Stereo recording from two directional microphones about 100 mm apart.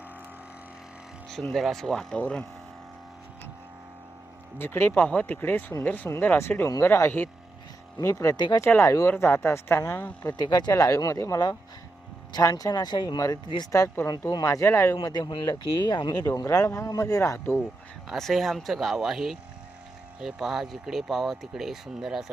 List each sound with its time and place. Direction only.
1.3 s speech: 5° left (ahead or behind)
4.5 s speech: 25° left (ahead or behind)
8.4 s speech: 45° left (ahead or behind)
8.6 s speech: 25° left (ahead or behind)
10.2 s speech: 40° left (ahead or behind)
14.4 s speech: 25° left (ahead or behind)
15.0 s speech: 45° left (ahead or behind)
16.3 s speech: 35° left (ahead or behind)
18.1 s speech: centre (ahead or behind)